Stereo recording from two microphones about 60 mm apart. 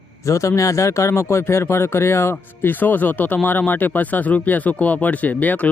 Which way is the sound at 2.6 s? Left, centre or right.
Left.